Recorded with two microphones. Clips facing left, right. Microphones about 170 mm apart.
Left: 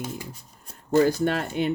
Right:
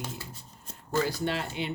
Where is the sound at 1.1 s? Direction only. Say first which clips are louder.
Left 7 dB; 50° left (ahead or behind).